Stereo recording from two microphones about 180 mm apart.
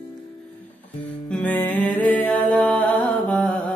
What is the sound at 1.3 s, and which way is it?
Music, 10° left (ahead or behind).